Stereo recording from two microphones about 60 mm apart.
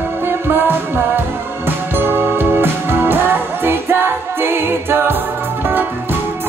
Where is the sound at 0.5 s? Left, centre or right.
Right.